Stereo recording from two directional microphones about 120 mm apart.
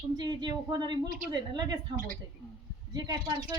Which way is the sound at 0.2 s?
40° right (ahead or behind).